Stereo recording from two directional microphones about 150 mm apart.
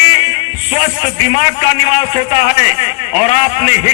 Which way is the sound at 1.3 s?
40° left (ahead or behind).